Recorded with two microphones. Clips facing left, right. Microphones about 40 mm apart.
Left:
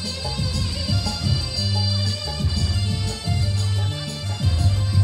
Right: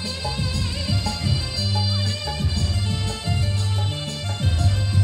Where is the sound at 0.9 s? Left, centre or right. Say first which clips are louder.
Even; right.